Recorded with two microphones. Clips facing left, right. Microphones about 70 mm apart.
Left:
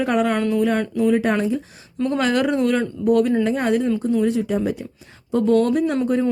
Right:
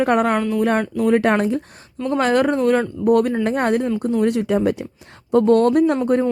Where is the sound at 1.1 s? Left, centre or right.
Right.